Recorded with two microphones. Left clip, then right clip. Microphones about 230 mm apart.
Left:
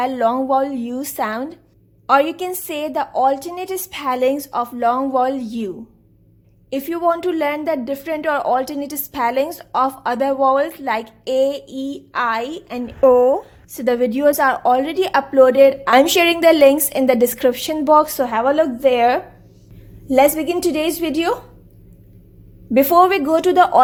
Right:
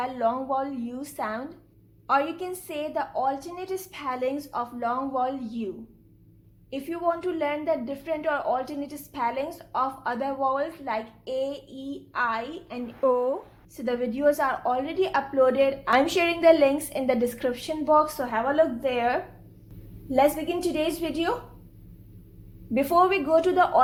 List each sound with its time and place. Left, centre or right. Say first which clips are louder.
0.2 s a woman's voice: left 9 dB; left
13.0 s a woman's voice: left 12 dB; left
13.7 s a woman's voice: left 11 dB; left
22.7 s a woman's voice: left 9 dB; left